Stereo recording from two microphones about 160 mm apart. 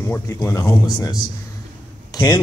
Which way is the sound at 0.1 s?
15° left (ahead or behind).